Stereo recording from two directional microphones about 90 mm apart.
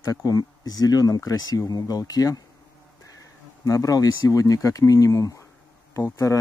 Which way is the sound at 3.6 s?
40° left (ahead or behind).